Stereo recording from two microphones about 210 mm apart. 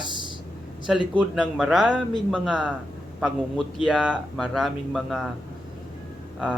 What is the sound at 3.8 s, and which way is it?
A man's voice, centre (ahead or behind).